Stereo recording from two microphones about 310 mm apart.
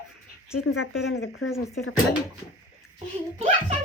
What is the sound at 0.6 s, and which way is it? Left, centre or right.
Speech, left.